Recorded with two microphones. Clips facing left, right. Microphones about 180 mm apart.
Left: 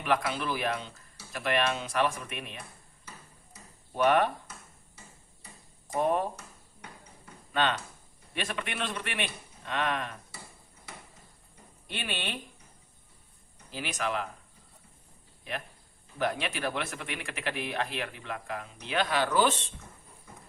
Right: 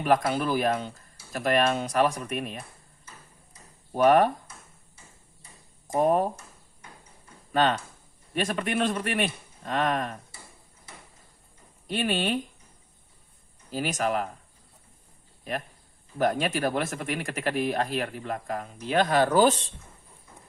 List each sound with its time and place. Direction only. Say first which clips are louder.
0.0 s speech: right 6 dB; 40° right (ahead or behind)
3.9 s speech: right 5 dB; 40° right (ahead or behind)
5.9 s speech: right 5 dB; 45° right (ahead or behind)
7.5 s speech: right 5 dB; 40° right (ahead or behind)
11.9 s speech: right 10 dB; 40° right (ahead or behind)
13.7 s speech: right 6 dB; 40° right (ahead or behind)
15.5 s speech: right 5 dB; 40° right (ahead or behind)